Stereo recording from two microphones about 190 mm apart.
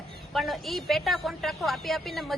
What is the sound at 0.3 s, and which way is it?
A woman's voice, centre (ahead or behind).